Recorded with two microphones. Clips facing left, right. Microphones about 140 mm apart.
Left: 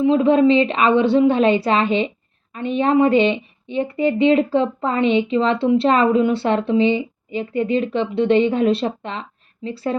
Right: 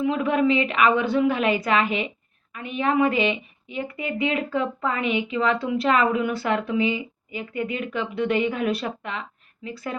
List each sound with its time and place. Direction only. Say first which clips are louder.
0.0 s speech: left 7 dB; 25° left (ahead or behind)